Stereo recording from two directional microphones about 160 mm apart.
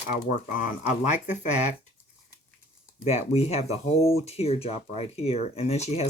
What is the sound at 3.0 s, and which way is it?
Speech, 40° left (ahead or behind).